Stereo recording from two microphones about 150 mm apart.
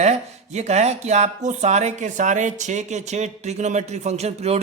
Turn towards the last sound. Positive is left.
turn(degrees=-45)  # may be behind; listen again after turning